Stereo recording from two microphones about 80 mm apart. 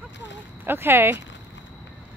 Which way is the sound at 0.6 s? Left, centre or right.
Right.